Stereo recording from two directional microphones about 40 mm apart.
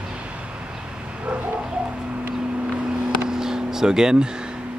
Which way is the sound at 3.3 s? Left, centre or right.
Centre.